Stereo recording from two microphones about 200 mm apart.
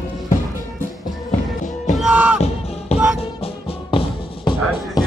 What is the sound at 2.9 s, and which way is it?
Music, 30° left (ahead or behind).